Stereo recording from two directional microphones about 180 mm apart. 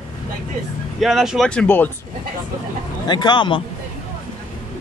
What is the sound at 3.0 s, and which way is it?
Speech, 25° left (ahead or behind).